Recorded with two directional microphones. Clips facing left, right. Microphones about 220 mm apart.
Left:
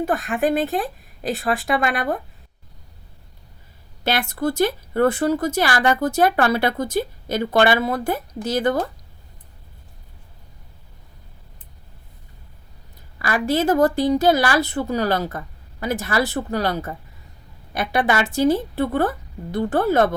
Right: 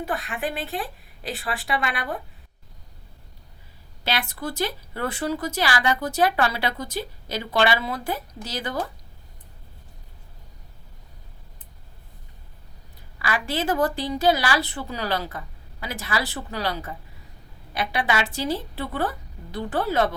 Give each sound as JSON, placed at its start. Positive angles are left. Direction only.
{"t": 0.0, "sound": "speech", "side_deg": 45}
{"t": 4.0, "sound": "speech", "side_deg": 45}
{"t": 13.1, "sound": "speech", "side_deg": 45}